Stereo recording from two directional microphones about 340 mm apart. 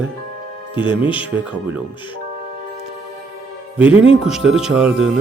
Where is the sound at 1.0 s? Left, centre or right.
Centre.